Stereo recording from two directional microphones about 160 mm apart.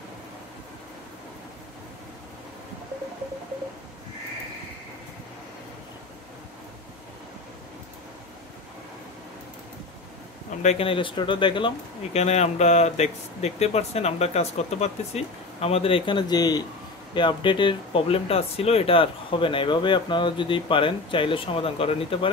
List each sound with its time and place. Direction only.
10.6 s speech: 40° left (ahead or behind)